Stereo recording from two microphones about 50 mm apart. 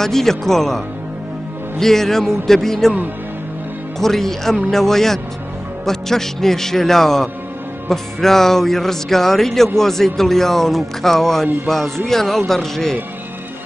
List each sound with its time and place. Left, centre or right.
0.0 s speech: centre
4.0 s speech: centre